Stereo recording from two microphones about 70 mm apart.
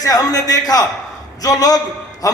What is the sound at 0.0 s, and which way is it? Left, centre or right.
A man's voice, left.